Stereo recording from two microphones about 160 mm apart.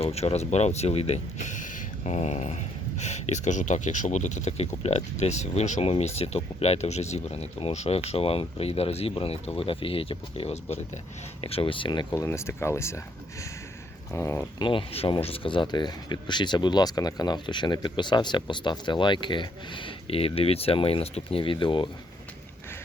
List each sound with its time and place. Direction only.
0.0 s speech: 40° left (ahead or behind)
12.1 s speech: 15° left (ahead or behind)
14.1 s speech: 15° left (ahead or behind)
14.6 s speech: 35° left (ahead or behind)